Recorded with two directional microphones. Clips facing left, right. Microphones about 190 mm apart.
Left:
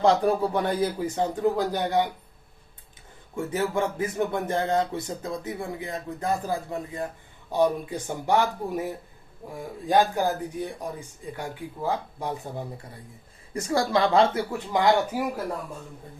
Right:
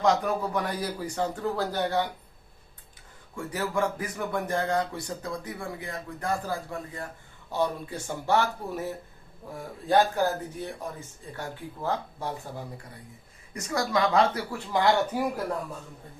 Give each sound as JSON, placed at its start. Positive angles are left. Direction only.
{"t": 0.0, "sound": "speech", "side_deg": 30}
{"t": 3.3, "sound": "speech", "side_deg": 25}
{"t": 13.5, "sound": "speech", "side_deg": 30}
{"t": 15.1, "sound": "speech", "side_deg": 5}